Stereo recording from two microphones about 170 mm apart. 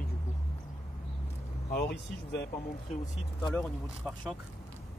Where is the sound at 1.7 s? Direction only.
75° left (ahead or behind).